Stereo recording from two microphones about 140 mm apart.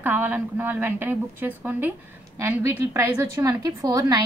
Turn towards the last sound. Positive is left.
turn(degrees=-25)  # may be behind; listen again after turning